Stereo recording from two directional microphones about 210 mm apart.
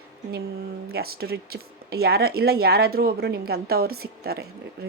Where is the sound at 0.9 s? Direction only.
45° right (ahead or behind).